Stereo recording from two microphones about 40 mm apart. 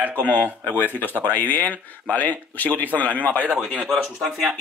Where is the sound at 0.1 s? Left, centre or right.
Left.